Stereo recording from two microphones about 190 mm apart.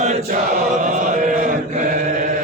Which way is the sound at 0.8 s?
40° right (ahead or behind).